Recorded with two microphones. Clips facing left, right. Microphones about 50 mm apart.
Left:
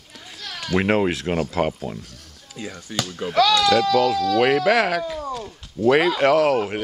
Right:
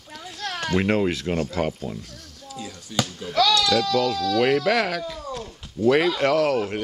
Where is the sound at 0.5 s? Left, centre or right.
Right.